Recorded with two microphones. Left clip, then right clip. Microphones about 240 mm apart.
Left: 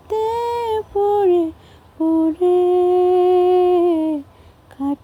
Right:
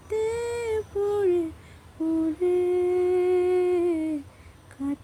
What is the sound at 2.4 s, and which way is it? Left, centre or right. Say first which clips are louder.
Humming: left 8 dB; left.